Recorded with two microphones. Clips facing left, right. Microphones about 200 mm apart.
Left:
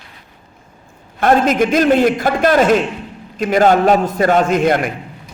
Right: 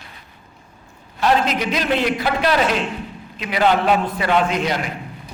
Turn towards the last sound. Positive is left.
turn(degrees=50)  # may be behind; listen again after turning